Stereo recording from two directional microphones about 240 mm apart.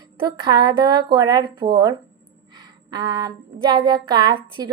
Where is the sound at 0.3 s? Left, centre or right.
Centre.